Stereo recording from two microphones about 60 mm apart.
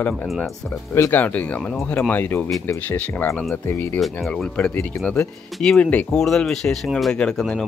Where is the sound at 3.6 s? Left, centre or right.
Left.